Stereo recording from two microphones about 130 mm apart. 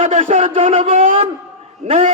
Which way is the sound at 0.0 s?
65° right (ahead or behind).